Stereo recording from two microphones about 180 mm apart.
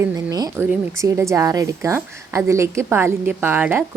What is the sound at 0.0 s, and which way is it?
A woman's voice, 15° right (ahead or behind).